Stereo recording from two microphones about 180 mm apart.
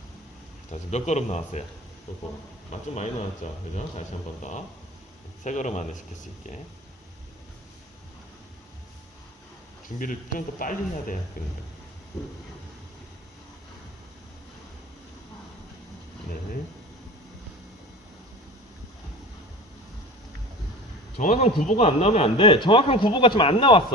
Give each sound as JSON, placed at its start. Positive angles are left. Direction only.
{"t": 0.7, "sound": "speech", "side_deg": 40}
{"t": 2.9, "sound": "speech", "side_deg": 40}
{"t": 5.4, "sound": "speech", "side_deg": 40}
{"t": 10.0, "sound": "speech", "side_deg": 50}
{"t": 21.2, "sound": "speech", "side_deg": 40}